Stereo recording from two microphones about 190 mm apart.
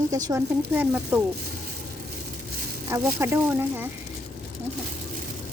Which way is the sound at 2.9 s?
15° right (ahead or behind).